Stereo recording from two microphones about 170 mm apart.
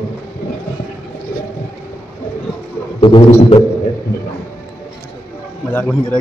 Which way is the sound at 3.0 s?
30° left (ahead or behind).